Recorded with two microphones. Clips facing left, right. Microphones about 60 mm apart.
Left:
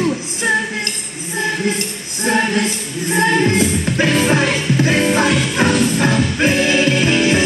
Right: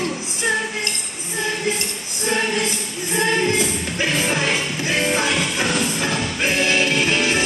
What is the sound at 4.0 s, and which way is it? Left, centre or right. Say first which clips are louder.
Music: left 6 dB; left.